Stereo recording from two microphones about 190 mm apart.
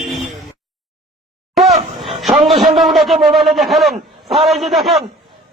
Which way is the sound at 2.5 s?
35° right (ahead or behind).